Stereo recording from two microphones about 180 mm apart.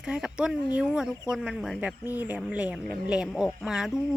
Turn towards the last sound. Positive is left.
turn(degrees=-5)  # may be behind; listen again after turning